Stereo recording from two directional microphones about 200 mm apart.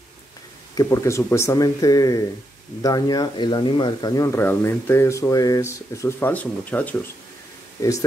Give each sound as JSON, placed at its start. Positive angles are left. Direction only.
{"t": 0.7, "sound": "speech", "side_deg": 15}